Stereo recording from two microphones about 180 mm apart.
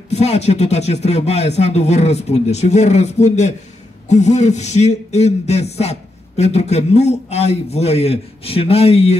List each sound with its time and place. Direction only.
0.1 s a man's voice: 35° left (ahead or behind)